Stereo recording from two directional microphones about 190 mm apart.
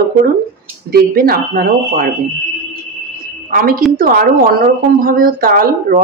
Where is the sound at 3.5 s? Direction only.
50° right (ahead or behind).